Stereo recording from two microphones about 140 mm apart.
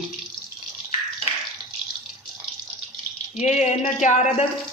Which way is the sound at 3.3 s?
55° left (ahead or behind).